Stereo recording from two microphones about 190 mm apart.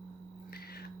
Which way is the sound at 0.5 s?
55° left (ahead or behind).